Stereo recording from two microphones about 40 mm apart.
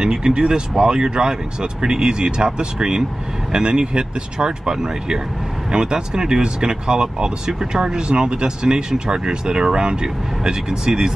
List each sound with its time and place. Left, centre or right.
0.0 s speech: right